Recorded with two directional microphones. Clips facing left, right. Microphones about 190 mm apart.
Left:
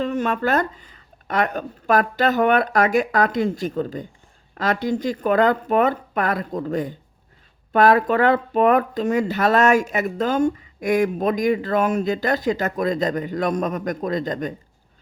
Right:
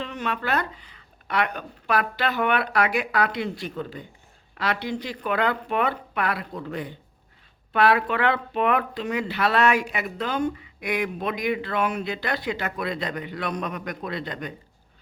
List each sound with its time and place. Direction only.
0.0 s speech: 45° left (ahead or behind)